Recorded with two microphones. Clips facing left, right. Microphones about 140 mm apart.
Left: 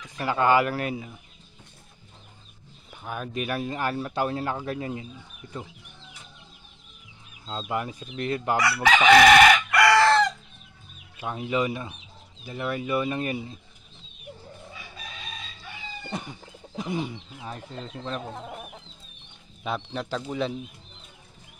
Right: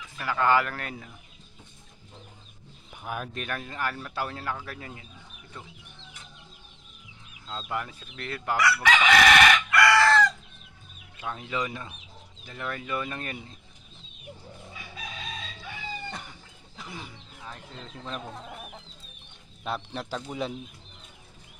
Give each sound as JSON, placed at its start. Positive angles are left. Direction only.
{"t": 0.2, "sound": "speech", "side_deg": 20}
{"t": 2.9, "sound": "a sound", "side_deg": -10}
{"t": 3.3, "sound": "speech", "side_deg": 10}
{"t": 7.4, "sound": "speech", "side_deg": 20}
{"t": 9.7, "sound": "chicken", "side_deg": 20}
{"t": 11.1, "sound": "speech", "side_deg": 20}
{"t": 16.1, "sound": "chicken", "side_deg": 20}
{"t": 19.6, "sound": "speech", "side_deg": 0}